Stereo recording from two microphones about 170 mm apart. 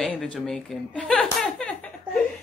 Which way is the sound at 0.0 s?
5° left (ahead or behind).